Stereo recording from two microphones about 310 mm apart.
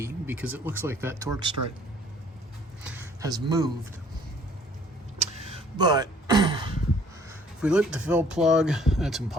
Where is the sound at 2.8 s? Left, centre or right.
Centre.